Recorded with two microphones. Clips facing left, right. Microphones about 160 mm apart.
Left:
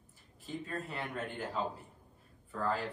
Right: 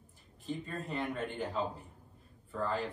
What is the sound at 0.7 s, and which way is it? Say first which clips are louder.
Speech: right 4 dB; 5° left (ahead or behind).